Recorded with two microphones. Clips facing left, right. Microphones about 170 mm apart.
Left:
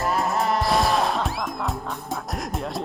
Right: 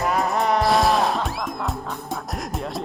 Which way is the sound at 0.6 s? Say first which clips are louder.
Right 3 dB; centre (ahead or behind).